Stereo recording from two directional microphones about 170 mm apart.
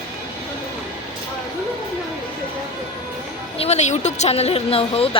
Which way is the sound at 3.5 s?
35° left (ahead or behind).